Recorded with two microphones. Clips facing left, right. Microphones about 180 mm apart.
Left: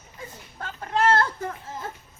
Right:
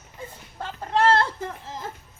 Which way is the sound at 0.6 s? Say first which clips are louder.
Right 2 dB; 25° right (ahead or behind).